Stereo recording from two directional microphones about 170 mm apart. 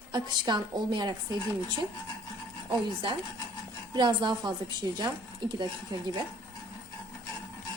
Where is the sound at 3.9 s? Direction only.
25° right (ahead or behind).